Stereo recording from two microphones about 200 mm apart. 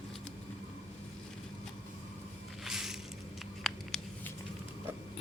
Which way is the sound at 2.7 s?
Centre (ahead or behind).